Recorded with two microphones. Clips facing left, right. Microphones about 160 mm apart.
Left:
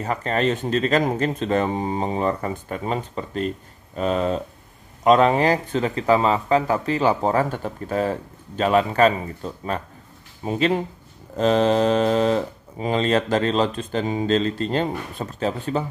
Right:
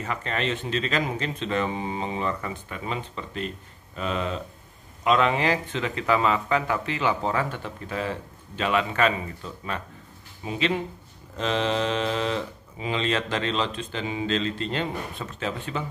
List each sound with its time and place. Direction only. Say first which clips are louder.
0.0 s speech: left 7 dB; 40° left (ahead or behind)